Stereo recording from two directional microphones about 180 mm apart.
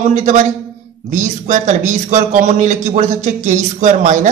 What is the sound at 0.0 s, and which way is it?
A man's voice, 40° right (ahead or behind).